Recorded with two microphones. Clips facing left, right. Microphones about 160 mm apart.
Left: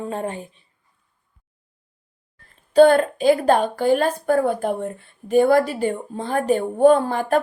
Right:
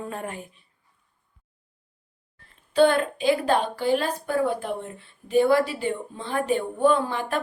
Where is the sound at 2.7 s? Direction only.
40° left (ahead or behind).